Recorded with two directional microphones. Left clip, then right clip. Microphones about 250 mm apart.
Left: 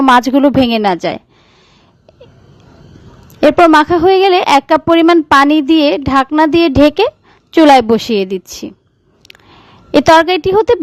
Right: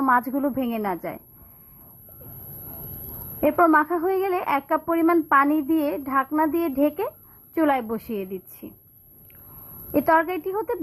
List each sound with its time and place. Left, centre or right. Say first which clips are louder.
0.0 s speech: left 13 dB; left
3.4 s speech: left 11 dB; left
9.9 s speech: left 13 dB; left